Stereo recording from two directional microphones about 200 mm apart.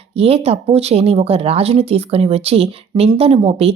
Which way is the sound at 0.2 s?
30° right (ahead or behind).